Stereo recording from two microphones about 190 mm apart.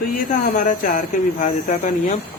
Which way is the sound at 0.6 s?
45° left (ahead or behind).